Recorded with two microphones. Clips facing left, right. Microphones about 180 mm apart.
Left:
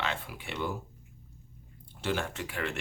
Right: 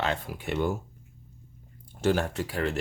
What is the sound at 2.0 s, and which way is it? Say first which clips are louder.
Speech: right 7 dB; 40° right (ahead or behind).